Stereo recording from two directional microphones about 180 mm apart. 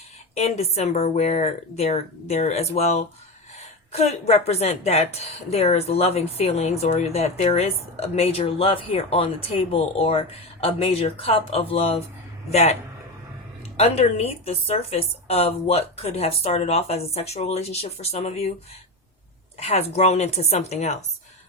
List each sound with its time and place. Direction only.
0.3 s a woman's voice: 35° left (ahead or behind)
13.7 s a woman's voice: 35° left (ahead or behind)
19.5 s a woman's voice: 35° left (ahead or behind)